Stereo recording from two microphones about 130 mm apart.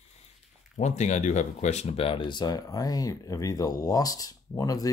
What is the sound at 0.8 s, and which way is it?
Speech, 65° left (ahead or behind).